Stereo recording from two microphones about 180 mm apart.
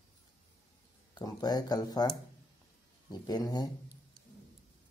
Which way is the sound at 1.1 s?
20° left (ahead or behind).